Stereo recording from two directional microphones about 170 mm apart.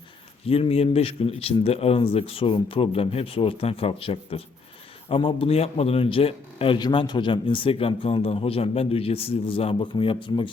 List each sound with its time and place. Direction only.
0.4 s a man's voice: 35° left (ahead or behind)